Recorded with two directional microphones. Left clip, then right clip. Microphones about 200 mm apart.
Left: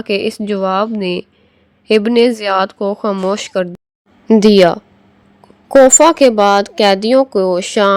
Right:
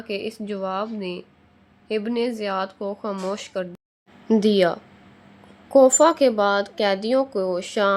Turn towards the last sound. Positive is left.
turn(degrees=40)  # may be behind; listen again after turning